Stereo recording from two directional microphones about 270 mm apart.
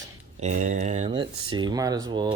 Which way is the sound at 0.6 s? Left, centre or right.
Right.